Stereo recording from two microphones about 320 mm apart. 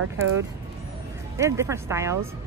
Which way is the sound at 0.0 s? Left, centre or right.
Right.